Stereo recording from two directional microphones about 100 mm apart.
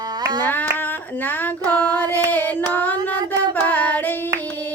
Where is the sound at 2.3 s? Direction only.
15° left (ahead or behind).